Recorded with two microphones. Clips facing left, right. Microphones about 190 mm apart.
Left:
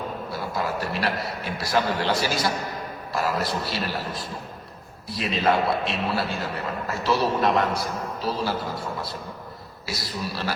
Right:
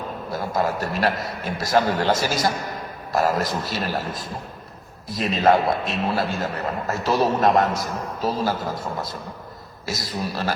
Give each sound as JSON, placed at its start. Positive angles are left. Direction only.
{"t": 0.3, "sound": "a man's voice", "side_deg": -45}